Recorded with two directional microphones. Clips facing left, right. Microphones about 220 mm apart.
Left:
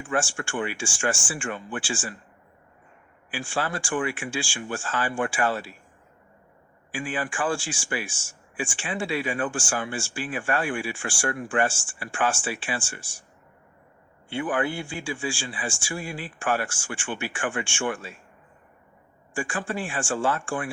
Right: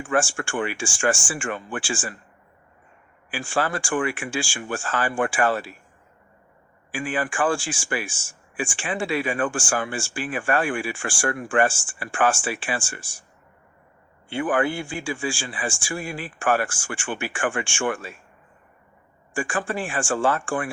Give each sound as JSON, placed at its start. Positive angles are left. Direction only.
{"t": 0.0, "sound": "speech", "side_deg": -50}
{"t": 3.3, "sound": "speech", "side_deg": -50}
{"t": 6.9, "sound": "speech", "side_deg": -50}
{"t": 14.3, "sound": "speech", "side_deg": -50}
{"t": 19.3, "sound": "speech", "side_deg": -50}